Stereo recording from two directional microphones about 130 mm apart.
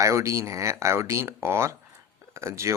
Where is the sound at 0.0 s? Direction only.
25° right (ahead or behind).